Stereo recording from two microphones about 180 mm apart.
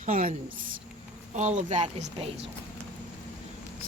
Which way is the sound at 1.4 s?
40° right (ahead or behind).